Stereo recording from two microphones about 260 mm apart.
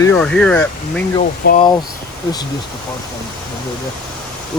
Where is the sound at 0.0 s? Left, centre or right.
Centre.